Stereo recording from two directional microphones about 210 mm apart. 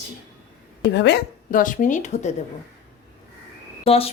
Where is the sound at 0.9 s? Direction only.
55° left (ahead or behind); by 2.3 s 35° left (ahead or behind).